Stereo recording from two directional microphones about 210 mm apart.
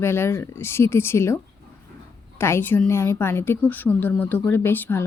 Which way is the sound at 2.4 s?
10° left (ahead or behind).